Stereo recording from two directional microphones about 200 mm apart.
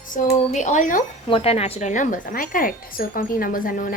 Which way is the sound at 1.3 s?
30° left (ahead or behind).